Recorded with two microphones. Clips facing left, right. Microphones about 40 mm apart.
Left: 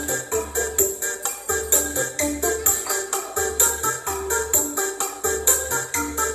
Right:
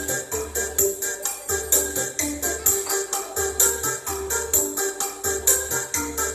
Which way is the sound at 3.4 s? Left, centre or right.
Left.